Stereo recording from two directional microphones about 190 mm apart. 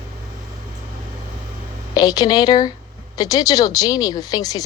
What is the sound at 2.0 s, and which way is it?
Speech, 20° left (ahead or behind).